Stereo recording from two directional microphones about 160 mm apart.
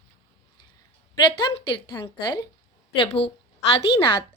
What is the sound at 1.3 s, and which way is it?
A woman's voice, 30° left (ahead or behind).